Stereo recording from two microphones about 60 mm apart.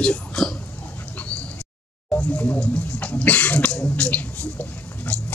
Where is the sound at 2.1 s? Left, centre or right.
Left.